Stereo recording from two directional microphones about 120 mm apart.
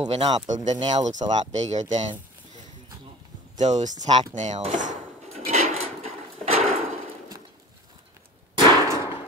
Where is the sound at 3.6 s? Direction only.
90° right.